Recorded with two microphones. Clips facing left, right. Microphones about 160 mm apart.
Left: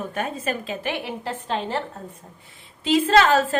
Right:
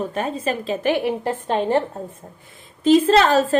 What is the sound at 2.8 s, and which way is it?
Speech, 35° right (ahead or behind).